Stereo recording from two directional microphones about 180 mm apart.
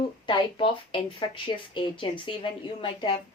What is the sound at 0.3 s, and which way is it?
Speech, 25° left (ahead or behind).